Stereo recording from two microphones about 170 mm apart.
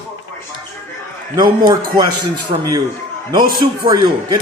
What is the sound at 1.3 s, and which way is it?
A man's voice, 25° right (ahead or behind).